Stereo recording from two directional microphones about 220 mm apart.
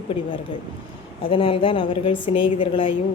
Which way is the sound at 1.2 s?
25° left (ahead or behind).